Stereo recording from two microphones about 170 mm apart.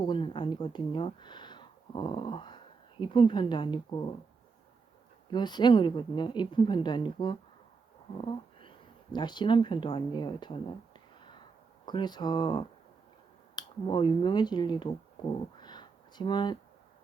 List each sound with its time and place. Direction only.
0.0 s a woman's voice: 30° left (ahead or behind)
5.3 s a woman's voice: 25° left (ahead or behind)
8.2 s a sound: 30° left (ahead or behind)
9.1 s a woman's voice: 25° left (ahead or behind)
11.9 s a woman's voice: 25° left (ahead or behind)
15.5 s a sound: 25° left (ahead or behind)